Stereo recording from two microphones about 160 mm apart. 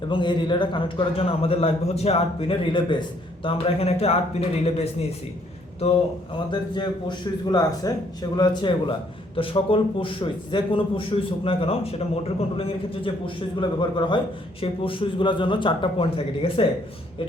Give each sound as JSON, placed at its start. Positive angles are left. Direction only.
{"t": 0.1, "sound": "speech", "side_deg": 30}
{"t": 6.5, "sound": "speech", "side_deg": 25}